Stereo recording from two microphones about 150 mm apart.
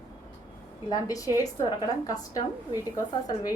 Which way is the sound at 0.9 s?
25° left (ahead or behind).